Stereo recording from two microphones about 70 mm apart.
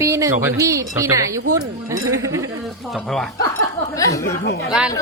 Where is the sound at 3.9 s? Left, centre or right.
Left.